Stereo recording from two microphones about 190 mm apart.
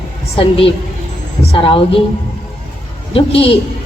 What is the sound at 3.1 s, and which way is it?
Speech, 30° left (ahead or behind).